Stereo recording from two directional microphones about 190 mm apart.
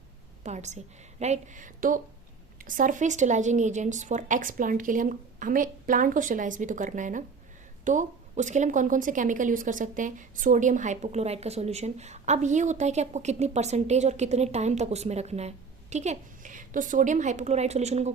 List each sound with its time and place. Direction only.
0.4 s a woman's voice: 35° right (ahead or behind)